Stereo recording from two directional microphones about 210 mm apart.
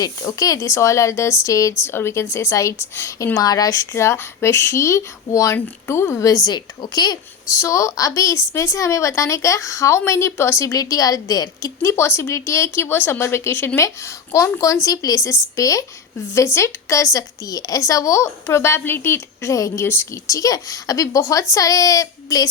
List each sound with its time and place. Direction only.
0.0 s a woman's voice: 15° left (ahead or behind)